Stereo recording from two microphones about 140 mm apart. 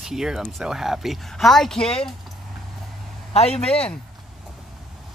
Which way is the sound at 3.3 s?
50° left (ahead or behind).